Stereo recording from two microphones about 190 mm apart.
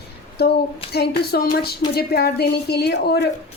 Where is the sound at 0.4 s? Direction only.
60° left (ahead or behind).